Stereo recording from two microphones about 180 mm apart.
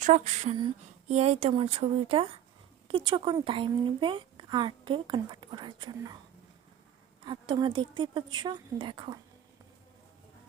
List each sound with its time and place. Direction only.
0.0 s speech: 40° right (ahead or behind); by 6.1 s 25° right (ahead or behind)
7.3 s speech: 25° right (ahead or behind)